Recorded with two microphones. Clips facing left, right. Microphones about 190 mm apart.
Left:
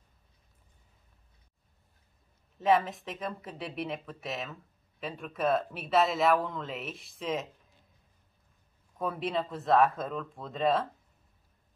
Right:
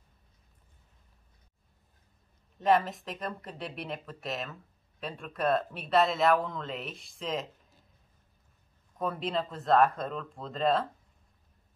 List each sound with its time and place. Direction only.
2.6 s speech: centre (ahead or behind)
8.9 s speech: centre (ahead or behind)